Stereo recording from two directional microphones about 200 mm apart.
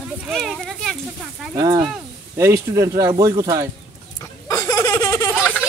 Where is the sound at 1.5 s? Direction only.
20° right (ahead or behind).